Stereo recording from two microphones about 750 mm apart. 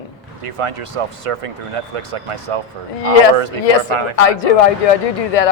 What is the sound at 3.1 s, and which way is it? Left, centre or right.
Speech, left.